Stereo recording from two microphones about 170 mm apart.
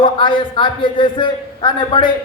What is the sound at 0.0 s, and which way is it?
A man's voice, 30° left (ahead or behind).